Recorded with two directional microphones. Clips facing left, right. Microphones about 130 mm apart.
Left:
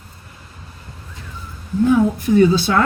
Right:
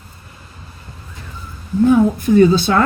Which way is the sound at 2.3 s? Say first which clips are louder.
Right 2 dB; 45° right (ahead or behind).